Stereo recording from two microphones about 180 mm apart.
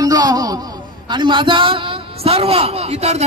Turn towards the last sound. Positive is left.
turn(degrees=-35)  # may be behind; listen again after turning